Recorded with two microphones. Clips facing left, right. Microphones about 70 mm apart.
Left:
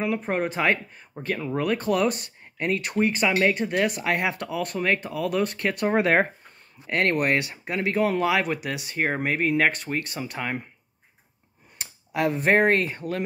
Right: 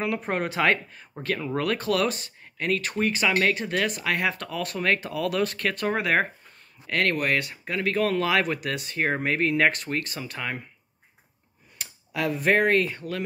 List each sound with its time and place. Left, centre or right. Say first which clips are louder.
0.0 s speech: left 2 dB; centre
2.5 s speech: left 1 dB; left
4.5 s speech: left 1 dB; centre
5.6 s speech: left 3 dB; left; by 9.9 s centre
10.4 s speech: left 1 dB; left
11.8 s speech: left 3 dB; left